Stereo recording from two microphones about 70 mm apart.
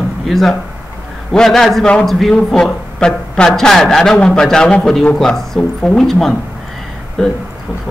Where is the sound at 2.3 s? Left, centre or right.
Centre.